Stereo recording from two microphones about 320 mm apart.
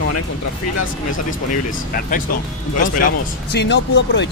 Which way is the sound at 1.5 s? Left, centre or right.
Left.